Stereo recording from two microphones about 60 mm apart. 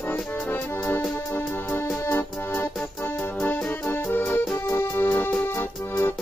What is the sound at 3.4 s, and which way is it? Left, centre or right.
Music, left.